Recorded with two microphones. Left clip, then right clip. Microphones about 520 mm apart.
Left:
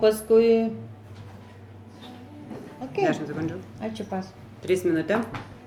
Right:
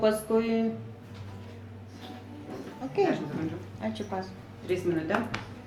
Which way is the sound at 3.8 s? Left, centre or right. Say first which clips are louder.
Left 1 dB; left.